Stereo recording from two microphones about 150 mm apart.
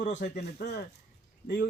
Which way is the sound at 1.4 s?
70° left (ahead or behind).